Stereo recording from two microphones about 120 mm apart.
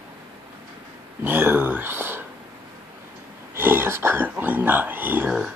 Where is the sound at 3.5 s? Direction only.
20° right (ahead or behind).